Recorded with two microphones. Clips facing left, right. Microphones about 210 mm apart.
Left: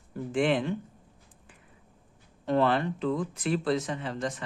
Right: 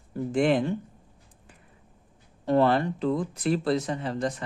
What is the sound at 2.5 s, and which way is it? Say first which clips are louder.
Speech: right 3 dB; 40° right (ahead or behind).